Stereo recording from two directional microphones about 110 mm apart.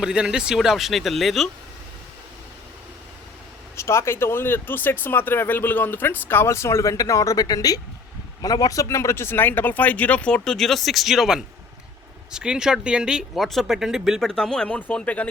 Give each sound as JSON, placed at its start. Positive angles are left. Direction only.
{"t": 0.0, "sound": "speech", "side_deg": -5}
{"t": 3.8, "sound": "speech", "side_deg": 25}